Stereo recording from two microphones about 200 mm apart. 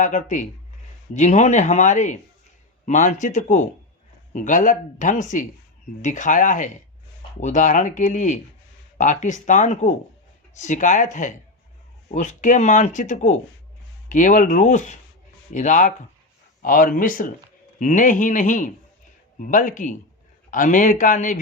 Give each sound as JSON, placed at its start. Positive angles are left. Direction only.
{"t": 0.0, "sound": "speech", "side_deg": 40}